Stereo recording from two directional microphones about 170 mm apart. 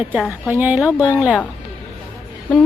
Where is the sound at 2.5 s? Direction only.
10° left (ahead or behind).